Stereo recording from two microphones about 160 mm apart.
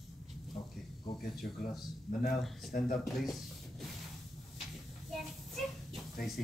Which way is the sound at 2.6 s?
70° left (ahead or behind).